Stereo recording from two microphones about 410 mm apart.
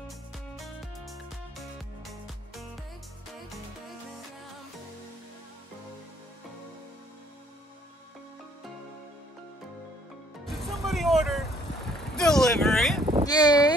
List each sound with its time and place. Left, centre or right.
0.6 s music: centre
10.4 s music: centre
12.0 s speech: centre